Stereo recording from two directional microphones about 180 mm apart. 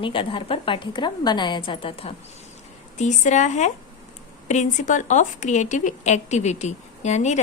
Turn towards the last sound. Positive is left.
turn(degrees=40)  # may be behind; listen again after turning